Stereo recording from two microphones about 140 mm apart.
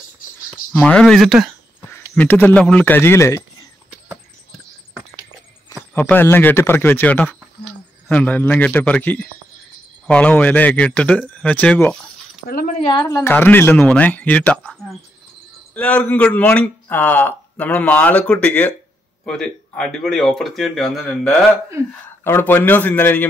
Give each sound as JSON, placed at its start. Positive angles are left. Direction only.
{"t": 0.7, "sound": "speech", "side_deg": 5}
{"t": 1.9, "sound": "a sound", "side_deg": 15}
{"t": 2.6, "sound": "a man's voice", "side_deg": 10}
{"t": 5.9, "sound": "a man's voice", "side_deg": 15}
{"t": 12.4, "sound": "speech", "side_deg": 80}
{"t": 13.0, "sound": "a woman's voice", "side_deg": 30}
{"t": 13.3, "sound": "a man's voice", "side_deg": 15}
{"t": 22.2, "sound": "a man's voice", "side_deg": 15}